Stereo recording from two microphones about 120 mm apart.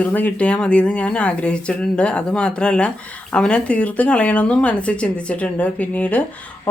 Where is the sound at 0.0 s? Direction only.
15° left (ahead or behind).